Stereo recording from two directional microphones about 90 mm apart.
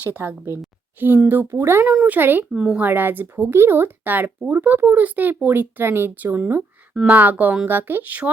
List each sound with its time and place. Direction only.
0.0 s speech: 20° right (ahead or behind)
1.9 s speech: 15° right (ahead or behind)
2.5 s speech: 10° right (ahead or behind)
2.8 s speech: 20° right (ahead or behind)